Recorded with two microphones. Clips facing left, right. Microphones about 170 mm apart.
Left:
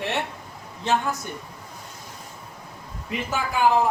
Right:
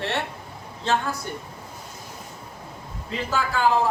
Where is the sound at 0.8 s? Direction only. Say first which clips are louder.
Left 1 dB; 20° left (ahead or behind).